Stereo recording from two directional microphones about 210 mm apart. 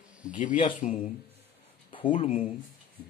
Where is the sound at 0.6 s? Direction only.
25° left (ahead or behind).